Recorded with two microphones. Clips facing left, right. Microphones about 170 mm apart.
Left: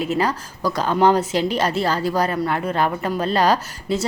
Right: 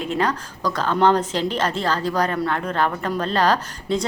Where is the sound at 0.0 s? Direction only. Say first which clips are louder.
Left 1 dB; 10° left (ahead or behind).